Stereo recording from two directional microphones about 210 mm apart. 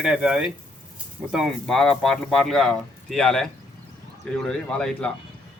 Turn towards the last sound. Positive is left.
turn(degrees=5)  # may be behind; listen again after turning